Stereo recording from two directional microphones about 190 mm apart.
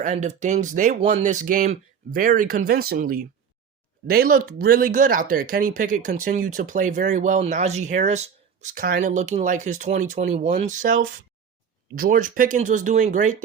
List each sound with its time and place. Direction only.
0.0 s speech: 40° right (ahead or behind)